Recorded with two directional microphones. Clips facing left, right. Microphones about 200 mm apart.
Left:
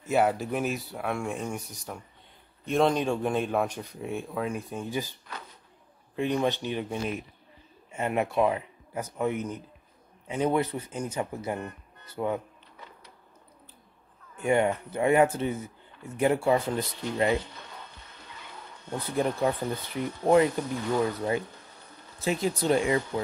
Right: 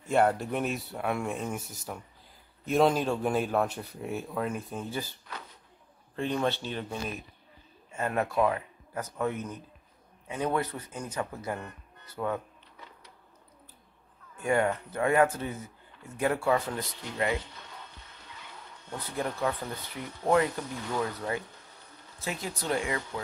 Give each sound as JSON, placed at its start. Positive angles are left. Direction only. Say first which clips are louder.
{"t": 0.0, "sound": "speech", "louder": "even", "side_deg": 5}
{"t": 4.8, "sound": "speech", "louder": "left 3 dB", "side_deg": 15}
{"t": 6.1, "sound": "speech", "louder": "left 3 dB", "side_deg": 15}
{"t": 14.4, "sound": "speech", "louder": "left 2 dB", "side_deg": 20}
{"t": 18.9, "sound": "speech", "louder": "left 6 dB", "side_deg": 25}